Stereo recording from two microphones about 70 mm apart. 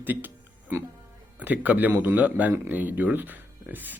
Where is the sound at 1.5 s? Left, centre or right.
Right.